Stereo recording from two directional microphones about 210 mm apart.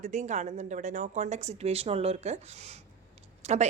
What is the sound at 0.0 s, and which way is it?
Speech, 35° right (ahead or behind).